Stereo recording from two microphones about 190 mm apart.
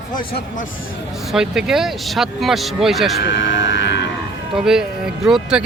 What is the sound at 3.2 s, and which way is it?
Vehicle, 75° left (ahead or behind).